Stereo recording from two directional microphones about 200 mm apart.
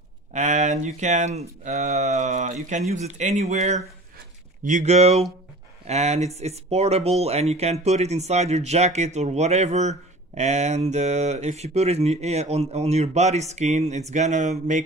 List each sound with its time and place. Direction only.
0.3 s speech: 35° right (ahead or behind)